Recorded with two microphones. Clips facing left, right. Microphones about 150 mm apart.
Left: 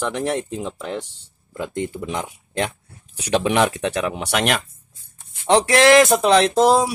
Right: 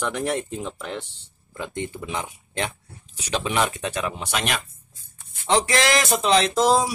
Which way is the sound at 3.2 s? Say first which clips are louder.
Left 6 dB; 60° left (ahead or behind).